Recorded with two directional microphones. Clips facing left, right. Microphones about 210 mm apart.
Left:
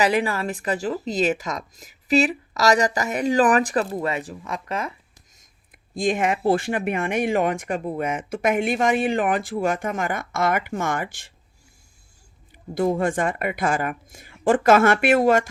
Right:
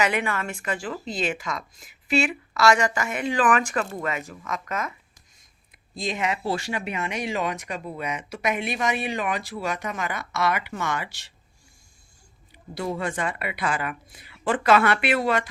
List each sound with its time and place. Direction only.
0.0 s a woman's voice: 35° left (ahead or behind)
5.4 s speech: 50° left (ahead or behind)
12.7 s speech: 50° left (ahead or behind)